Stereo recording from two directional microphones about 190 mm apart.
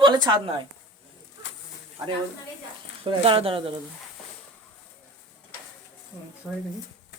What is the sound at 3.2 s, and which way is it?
Speech, 30° right (ahead or behind).